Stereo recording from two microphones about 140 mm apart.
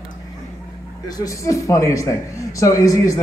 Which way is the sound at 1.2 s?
25° left (ahead or behind).